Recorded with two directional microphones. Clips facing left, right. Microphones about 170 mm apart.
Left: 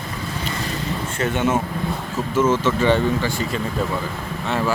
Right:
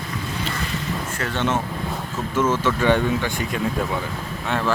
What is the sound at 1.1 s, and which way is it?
Speech, 20° left (ahead or behind).